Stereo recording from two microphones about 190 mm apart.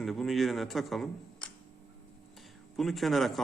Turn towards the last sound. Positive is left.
turn(degrees=0)  # may be behind; listen again after turning